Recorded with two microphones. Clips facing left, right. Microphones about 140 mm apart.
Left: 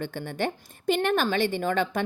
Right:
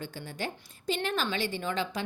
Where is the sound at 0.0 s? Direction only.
55° left (ahead or behind).